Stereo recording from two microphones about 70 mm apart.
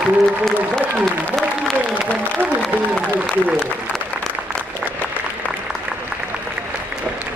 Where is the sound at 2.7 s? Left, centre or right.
Centre.